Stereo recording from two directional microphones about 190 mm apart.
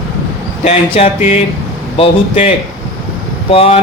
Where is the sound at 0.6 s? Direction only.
30° left (ahead or behind).